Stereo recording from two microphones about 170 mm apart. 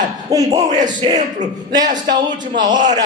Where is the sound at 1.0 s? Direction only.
30° right (ahead or behind).